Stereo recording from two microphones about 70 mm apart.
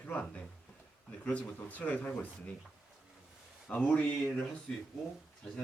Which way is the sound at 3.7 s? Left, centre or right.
Centre.